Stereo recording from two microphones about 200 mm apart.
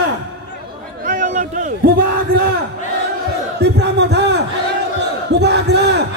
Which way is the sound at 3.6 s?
60° right (ahead or behind).